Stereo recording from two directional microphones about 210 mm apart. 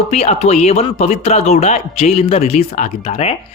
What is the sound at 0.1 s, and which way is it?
A man's voice, 30° left (ahead or behind).